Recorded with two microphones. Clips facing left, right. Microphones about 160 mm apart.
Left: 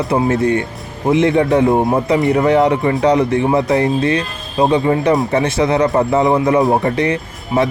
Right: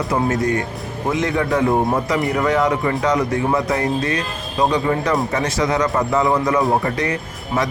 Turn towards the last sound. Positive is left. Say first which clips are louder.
# left 5 dB
turn(degrees=25)  # may be behind; listen again after turning